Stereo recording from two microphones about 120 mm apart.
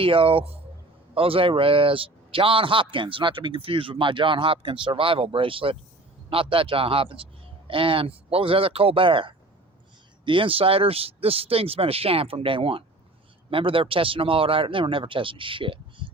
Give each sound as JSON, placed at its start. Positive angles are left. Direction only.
{"t": 0.0, "sound": "a man's voice", "side_deg": -50}